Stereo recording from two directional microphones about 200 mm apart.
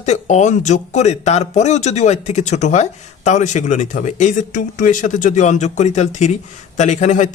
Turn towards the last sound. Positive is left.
turn(degrees=35)  # may be behind; listen again after turning